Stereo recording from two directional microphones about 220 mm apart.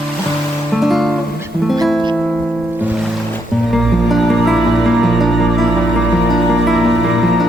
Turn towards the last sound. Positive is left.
turn(degrees=0)  # may be behind; listen again after turning